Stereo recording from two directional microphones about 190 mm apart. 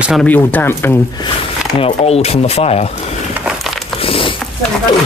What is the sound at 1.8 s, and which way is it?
Speech, 30° left (ahead or behind).